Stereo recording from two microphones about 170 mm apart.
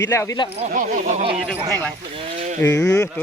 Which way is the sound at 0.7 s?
45° right (ahead or behind).